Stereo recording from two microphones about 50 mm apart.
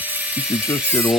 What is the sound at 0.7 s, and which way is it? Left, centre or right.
Speech, left.